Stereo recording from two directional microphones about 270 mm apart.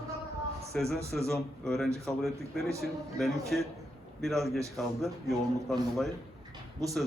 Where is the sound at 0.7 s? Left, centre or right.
Centre.